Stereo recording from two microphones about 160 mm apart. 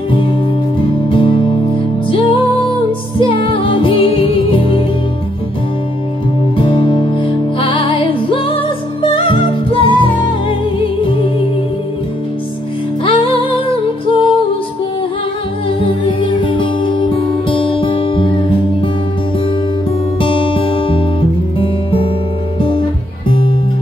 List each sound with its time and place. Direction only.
0.1 s music: 30° left (ahead or behind)
6.5 s music: 35° left (ahead or behind)
13.0 s music: 35° left (ahead or behind)
15.8 s music: 35° left (ahead or behind)
20.2 s music: 30° left (ahead or behind)